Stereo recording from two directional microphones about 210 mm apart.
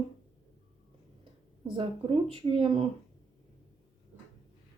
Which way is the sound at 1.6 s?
25° right (ahead or behind).